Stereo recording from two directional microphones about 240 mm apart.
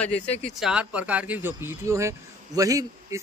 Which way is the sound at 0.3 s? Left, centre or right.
Left.